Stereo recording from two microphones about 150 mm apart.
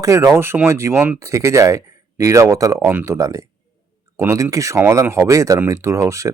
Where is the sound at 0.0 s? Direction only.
20° right (ahead or behind).